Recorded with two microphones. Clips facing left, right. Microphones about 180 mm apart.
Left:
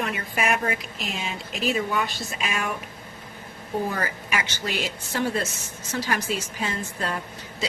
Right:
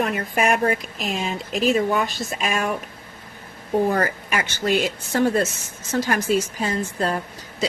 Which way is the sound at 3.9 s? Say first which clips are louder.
Right 6 dB; 50° right (ahead or behind).